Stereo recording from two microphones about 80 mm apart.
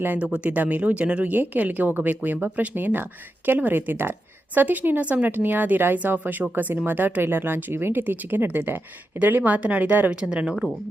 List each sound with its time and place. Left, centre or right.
0.0 s speech: right; by 10.7 s centre